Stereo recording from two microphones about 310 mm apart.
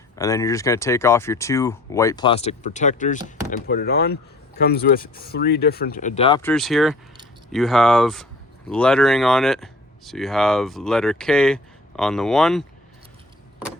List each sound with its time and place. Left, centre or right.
0.2 s speech: centre
6.5 s speech: centre